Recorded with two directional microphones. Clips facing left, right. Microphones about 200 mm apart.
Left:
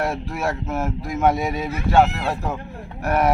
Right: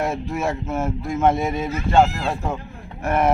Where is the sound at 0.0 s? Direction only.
Centre (ahead or behind).